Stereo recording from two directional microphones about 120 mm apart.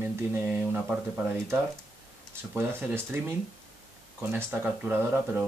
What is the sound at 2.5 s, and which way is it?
Speech, 15° right (ahead or behind).